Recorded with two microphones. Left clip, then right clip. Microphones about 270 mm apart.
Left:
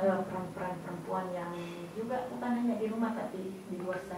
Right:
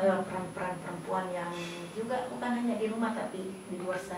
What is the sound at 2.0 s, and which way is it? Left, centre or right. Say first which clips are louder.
A woman's voice: right 2 dB; centre.